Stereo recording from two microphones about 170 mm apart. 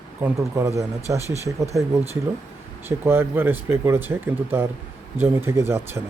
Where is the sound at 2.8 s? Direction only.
15° right (ahead or behind).